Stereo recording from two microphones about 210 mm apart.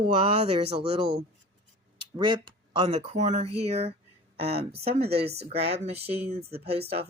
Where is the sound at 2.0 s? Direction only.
25° right (ahead or behind).